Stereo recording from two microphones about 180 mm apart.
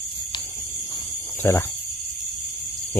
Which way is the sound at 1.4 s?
15° left (ahead or behind).